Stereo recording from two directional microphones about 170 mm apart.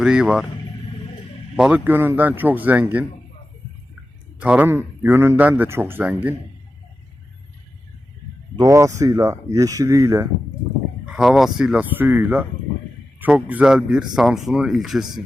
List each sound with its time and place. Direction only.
0.0 s speech: 5° right (ahead or behind)
1.5 s a man's voice: 5° right (ahead or behind)
4.4 s a man's voice: 10° right (ahead or behind)
8.5 s speech: 20° right (ahead or behind)
11.0 s a man's voice: 5° right (ahead or behind)